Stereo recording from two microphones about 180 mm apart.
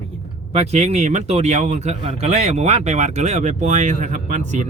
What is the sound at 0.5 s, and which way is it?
Speech, 40° right (ahead or behind).